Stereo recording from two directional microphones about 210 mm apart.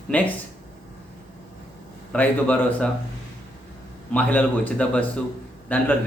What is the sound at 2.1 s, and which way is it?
Speech, 10° left (ahead or behind).